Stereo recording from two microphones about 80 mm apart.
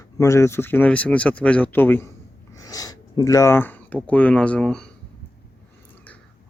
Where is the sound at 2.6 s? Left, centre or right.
Left.